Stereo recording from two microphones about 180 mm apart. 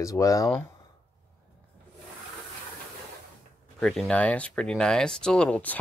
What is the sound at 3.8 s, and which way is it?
Speech, 5° left (ahead or behind).